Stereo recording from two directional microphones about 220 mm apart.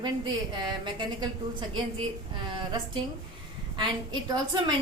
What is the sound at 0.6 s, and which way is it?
A woman's voice, 20° right (ahead or behind).